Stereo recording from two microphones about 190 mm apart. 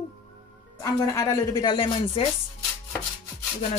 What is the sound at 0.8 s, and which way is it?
Speech, 15° left (ahead or behind).